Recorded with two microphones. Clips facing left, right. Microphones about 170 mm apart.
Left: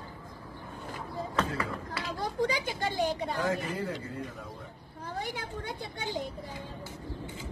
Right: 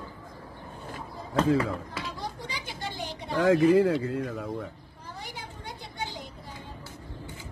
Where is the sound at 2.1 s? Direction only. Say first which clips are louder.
Left 7 dB; 45° left (ahead or behind).